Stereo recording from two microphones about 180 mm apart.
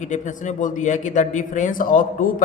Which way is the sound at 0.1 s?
45° left (ahead or behind).